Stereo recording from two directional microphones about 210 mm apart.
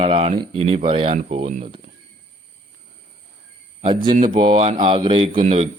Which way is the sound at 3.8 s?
25° right (ahead or behind).